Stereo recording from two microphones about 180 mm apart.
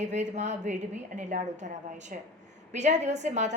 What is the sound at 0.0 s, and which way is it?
A woman's voice, 40° right (ahead or behind).